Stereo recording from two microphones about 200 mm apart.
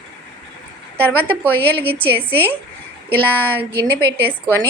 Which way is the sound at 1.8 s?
30° right (ahead or behind).